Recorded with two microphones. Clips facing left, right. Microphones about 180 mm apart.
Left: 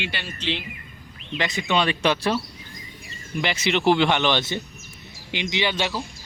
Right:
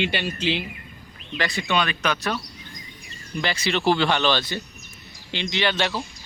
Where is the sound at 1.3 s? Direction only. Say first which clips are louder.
Left 1 dB; 20° left (ahead or behind).